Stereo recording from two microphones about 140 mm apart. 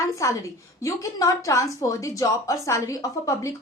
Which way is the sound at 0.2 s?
20° left (ahead or behind).